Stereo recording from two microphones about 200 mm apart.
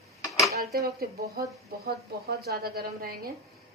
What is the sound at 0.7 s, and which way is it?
A woman's voice, 50° right (ahead or behind).